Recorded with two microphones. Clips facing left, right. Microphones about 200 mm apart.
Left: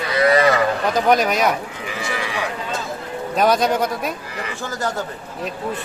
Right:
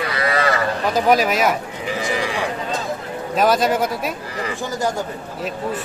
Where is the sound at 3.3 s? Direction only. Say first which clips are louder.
Even; centre (ahead or behind).